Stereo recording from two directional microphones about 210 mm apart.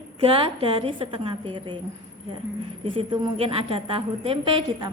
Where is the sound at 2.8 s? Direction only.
25° right (ahead or behind).